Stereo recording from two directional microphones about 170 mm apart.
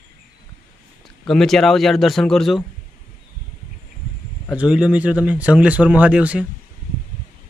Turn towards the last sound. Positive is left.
turn(degrees=-10)  # may be behind; listen again after turning